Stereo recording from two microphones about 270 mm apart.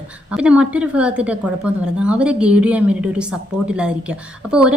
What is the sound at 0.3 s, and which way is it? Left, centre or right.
A woman's voice, centre.